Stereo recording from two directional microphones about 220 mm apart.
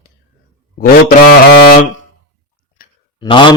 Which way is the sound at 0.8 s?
40° left (ahead or behind).